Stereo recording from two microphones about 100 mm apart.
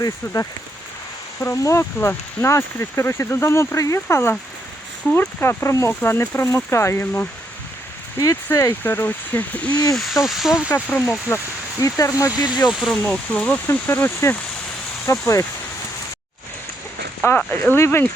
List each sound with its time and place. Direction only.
1.4 s speech: 30° left (ahead or behind)
8.4 s speech: 30° left (ahead or behind)
9.9 s speech: centre (ahead or behind)
10.8 s speech: 15° left (ahead or behind); by 12.5 s 35° left (ahead or behind)
12.6 s speech: centre (ahead or behind)
13.0 s speech: 15° left (ahead or behind); by 15.2 s 30° left (ahead or behind)
17.2 s speech: 20° left (ahead or behind)